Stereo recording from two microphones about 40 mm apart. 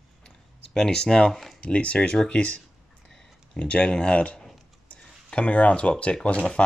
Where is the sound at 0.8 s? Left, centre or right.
Centre.